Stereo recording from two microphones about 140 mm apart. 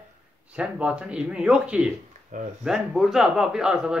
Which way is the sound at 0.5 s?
10° right (ahead or behind).